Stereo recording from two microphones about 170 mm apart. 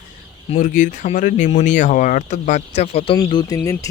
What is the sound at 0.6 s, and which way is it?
Speech, 50° left (ahead or behind).